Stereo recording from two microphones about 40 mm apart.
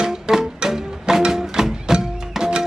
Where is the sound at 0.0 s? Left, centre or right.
Centre.